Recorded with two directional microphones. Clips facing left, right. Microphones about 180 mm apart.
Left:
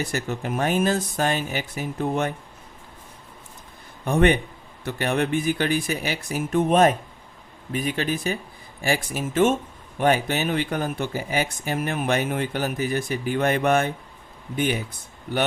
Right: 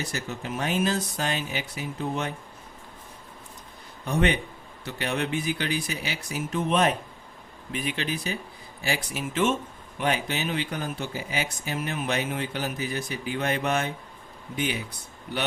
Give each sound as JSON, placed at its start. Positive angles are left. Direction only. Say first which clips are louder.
{"t": 0.0, "sound": "speech", "louder": "left 5 dB", "side_deg": 55}
{"t": 4.0, "sound": "speech", "louder": "left 5 dB", "side_deg": 55}